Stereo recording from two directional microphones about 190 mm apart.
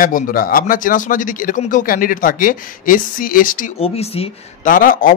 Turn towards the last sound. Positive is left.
turn(degrees=45)  # may be behind; listen again after turning